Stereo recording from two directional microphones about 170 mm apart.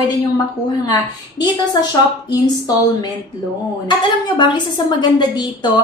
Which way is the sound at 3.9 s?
25° left (ahead or behind).